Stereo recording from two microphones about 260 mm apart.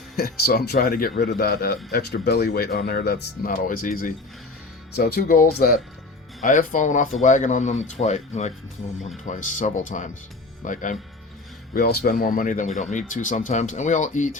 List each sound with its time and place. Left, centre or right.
0.2 s speech: left